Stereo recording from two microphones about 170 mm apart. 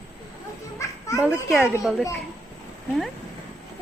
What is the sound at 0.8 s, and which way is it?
Children playing, 20° left (ahead or behind).